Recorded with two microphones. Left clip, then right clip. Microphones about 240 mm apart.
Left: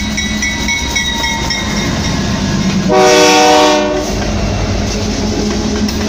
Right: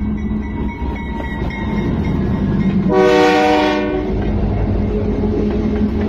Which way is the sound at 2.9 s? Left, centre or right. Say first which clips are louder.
Left 4 dB; left.